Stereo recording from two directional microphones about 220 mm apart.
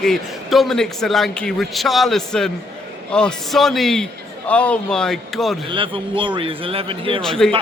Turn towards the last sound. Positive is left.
turn(degrees=0)  # may be behind; listen again after turning